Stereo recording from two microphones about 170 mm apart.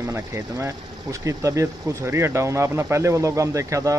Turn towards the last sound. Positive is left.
turn(degrees=-20)  # may be behind; listen again after turning